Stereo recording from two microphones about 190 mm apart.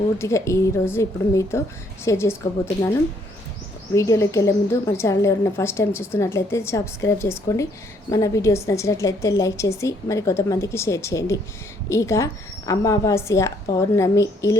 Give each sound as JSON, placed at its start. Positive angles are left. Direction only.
{"t": 0.2, "sound": "a woman's voice", "side_deg": 15}
{"t": 3.9, "sound": "a woman's voice", "side_deg": 15}